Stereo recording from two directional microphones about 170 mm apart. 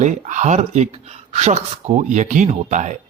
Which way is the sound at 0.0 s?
45° right (ahead or behind).